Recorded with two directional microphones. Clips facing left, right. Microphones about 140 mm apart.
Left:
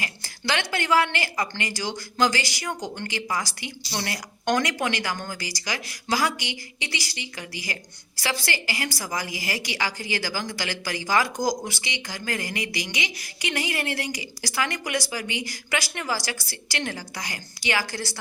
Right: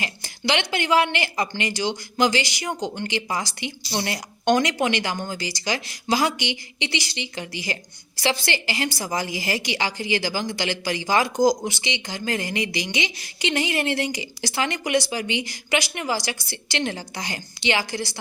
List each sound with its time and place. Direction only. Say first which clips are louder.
0.0 s speech: right 4 dB; 20° right (ahead or behind)